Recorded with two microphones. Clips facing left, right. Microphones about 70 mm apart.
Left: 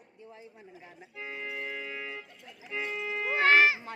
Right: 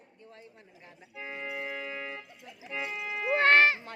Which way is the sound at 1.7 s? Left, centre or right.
Centre.